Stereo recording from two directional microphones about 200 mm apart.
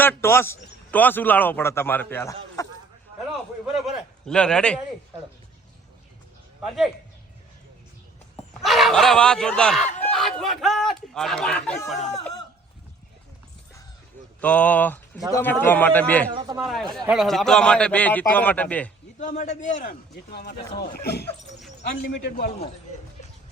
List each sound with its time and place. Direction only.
0.0 s a man's voice: 10° left (ahead or behind)
3.8 s a man's voice: centre (ahead or behind)
6.6 s speech: centre (ahead or behind)
8.6 s speech: centre (ahead or behind)
14.4 s a man's voice: 5° left (ahead or behind)
16.3 s speech: 20° right (ahead or behind)
16.6 s speech: centre (ahead or behind)
19.2 s a man's voice: 35° left (ahead or behind); by 22.5 s 55° left (ahead or behind)